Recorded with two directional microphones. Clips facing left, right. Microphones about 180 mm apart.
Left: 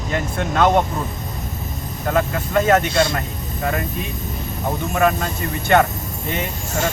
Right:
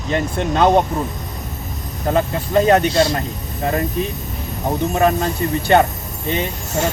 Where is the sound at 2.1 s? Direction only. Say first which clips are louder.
Right 2 dB; 30° right (ahead or behind).